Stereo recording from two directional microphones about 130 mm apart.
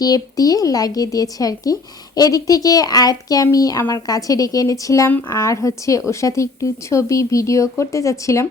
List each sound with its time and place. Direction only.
0.0 s speech: 30° left (ahead or behind)